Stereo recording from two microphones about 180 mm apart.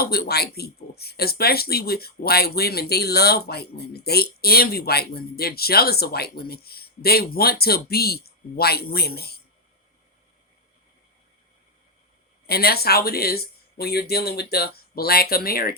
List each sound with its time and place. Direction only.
0.0 s speech: 60° left (ahead or behind)
12.5 s speech: 60° left (ahead or behind)